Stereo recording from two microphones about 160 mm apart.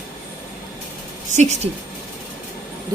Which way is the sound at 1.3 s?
45° right (ahead or behind).